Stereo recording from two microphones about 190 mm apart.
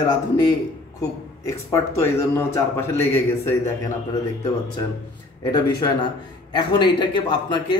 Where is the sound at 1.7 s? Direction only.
15° left (ahead or behind).